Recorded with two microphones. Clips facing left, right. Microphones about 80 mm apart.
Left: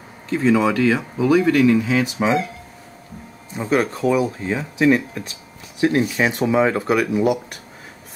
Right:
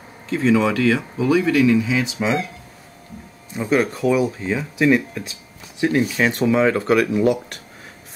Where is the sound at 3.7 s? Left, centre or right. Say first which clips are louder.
Even; left.